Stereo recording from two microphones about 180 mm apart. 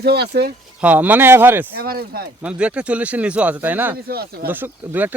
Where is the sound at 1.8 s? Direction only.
55° right (ahead or behind).